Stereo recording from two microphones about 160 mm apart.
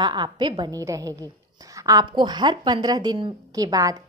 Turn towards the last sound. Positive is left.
turn(degrees=-20)  # may be behind; listen again after turning